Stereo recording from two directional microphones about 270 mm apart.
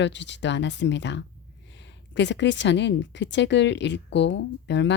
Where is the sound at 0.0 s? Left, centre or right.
Left.